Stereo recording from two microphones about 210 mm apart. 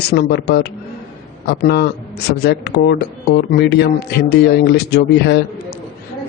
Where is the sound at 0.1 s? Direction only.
50° left (ahead or behind).